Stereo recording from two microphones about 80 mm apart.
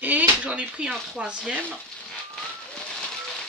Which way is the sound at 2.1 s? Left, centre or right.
Centre.